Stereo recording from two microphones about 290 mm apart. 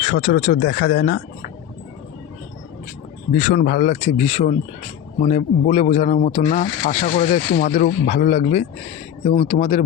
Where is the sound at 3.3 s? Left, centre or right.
Left.